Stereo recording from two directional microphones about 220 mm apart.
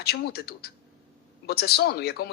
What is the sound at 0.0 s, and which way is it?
A man's voice, 45° left (ahead or behind).